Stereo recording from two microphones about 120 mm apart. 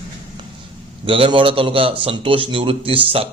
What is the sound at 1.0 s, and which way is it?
Speech, 45° right (ahead or behind).